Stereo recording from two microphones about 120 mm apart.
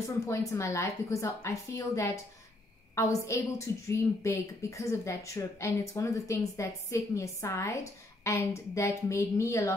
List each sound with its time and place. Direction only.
0.0 s a woman's voice: 25° left (ahead or behind)